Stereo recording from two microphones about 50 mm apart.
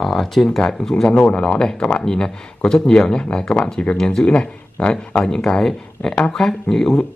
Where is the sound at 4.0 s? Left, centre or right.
Centre.